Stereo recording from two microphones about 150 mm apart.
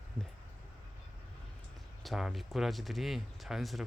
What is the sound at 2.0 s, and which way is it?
Speech, centre (ahead or behind).